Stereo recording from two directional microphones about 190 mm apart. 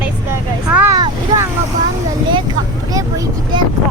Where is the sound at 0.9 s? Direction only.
20° right (ahead or behind).